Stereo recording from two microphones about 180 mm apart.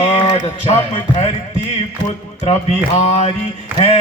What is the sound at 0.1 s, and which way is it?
Speech, 35° left (ahead or behind).